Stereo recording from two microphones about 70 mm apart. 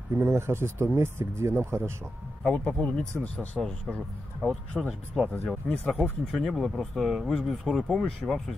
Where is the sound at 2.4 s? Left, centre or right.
Centre.